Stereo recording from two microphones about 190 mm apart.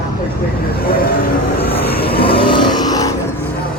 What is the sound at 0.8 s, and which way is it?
Vehicle, 50° left (ahead or behind).